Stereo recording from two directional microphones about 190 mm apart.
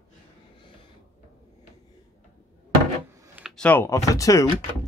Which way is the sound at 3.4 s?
Centre (ahead or behind).